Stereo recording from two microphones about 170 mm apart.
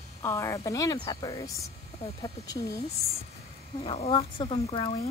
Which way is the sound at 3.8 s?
30° left (ahead or behind).